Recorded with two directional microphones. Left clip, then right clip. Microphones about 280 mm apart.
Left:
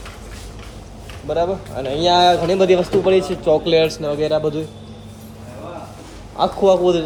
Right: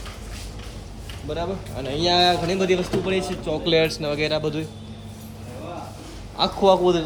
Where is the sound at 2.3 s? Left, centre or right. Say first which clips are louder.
Left 7 dB; centre.